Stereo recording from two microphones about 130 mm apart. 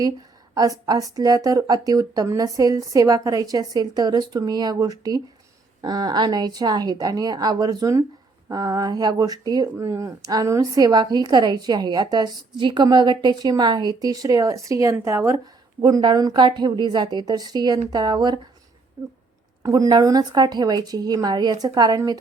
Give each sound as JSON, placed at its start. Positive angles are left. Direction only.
{"t": 0.5, "sound": "a woman's voice", "side_deg": -30}
{"t": 15.8, "sound": "a woman's voice", "side_deg": -35}